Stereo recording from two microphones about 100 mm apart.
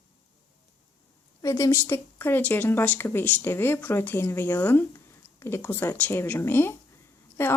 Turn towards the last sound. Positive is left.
turn(degrees=20)  # may be behind; listen again after turning